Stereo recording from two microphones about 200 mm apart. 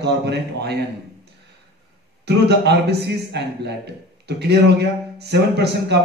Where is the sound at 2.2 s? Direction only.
55° right (ahead or behind).